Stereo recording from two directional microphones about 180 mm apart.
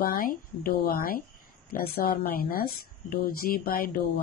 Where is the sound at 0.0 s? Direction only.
55° left (ahead or behind).